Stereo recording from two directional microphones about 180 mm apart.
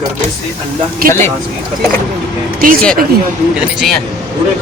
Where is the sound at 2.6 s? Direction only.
50° right (ahead or behind).